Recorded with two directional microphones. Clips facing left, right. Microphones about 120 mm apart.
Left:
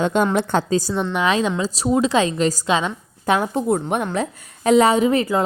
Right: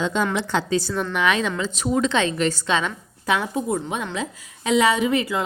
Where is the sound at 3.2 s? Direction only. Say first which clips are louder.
Left 4 dB; 50° left (ahead or behind).